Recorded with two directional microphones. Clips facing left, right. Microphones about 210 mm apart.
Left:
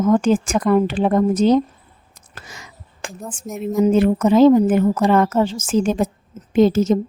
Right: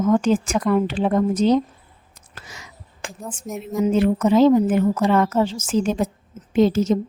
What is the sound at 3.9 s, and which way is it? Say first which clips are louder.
A woman's voice: left 1 dB; 50° left (ahead or behind).